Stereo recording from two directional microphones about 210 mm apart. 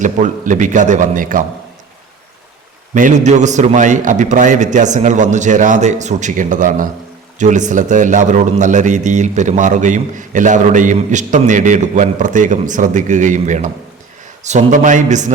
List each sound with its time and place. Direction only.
0.0 s a man's voice: 35° right (ahead or behind)
2.9 s a man's voice: 35° right (ahead or behind)